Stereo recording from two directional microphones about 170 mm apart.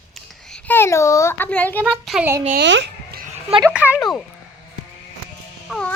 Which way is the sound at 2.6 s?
90° right.